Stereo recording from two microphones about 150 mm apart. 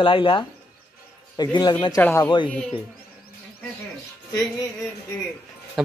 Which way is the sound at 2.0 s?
10° left (ahead or behind).